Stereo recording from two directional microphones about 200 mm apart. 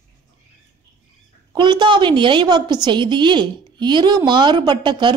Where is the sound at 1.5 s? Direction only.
20° right (ahead or behind).